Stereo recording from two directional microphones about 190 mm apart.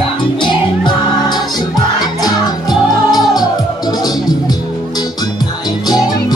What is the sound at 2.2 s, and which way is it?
Music, 20° left (ahead or behind).